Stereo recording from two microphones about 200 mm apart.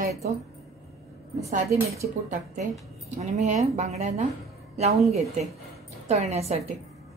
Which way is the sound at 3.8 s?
35° right (ahead or behind).